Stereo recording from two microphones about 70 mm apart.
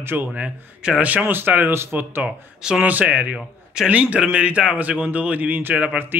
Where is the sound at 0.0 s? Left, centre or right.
Right.